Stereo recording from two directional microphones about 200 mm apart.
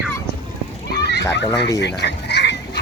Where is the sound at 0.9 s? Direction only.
55° left (ahead or behind).